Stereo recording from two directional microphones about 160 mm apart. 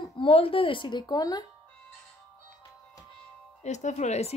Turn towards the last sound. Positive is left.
turn(degrees=45)  # may be behind; listen again after turning